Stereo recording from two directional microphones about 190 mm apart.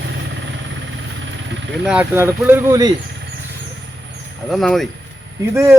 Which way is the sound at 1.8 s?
5° right (ahead or behind).